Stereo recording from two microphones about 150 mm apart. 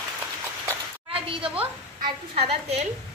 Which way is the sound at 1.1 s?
35° right (ahead or behind).